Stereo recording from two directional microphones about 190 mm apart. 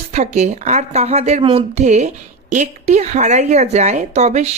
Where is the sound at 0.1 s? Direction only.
35° right (ahead or behind).